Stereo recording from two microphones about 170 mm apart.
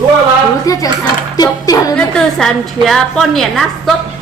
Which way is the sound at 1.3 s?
20° left (ahead or behind).